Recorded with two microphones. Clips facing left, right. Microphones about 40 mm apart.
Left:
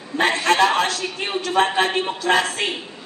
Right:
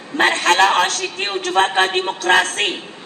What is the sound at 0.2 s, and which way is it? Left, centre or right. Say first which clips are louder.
A man's voice: right 3 dB; right.